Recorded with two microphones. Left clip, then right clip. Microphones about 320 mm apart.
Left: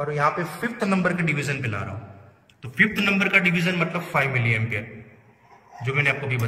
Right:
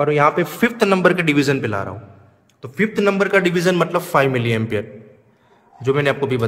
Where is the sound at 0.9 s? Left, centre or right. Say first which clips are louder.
Right 7 dB; right.